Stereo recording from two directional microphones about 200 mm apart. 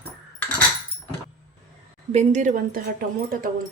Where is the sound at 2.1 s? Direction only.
35° right (ahead or behind).